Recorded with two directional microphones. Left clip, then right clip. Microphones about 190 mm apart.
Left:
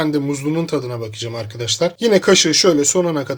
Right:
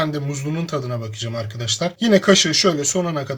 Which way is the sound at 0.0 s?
50° left (ahead or behind).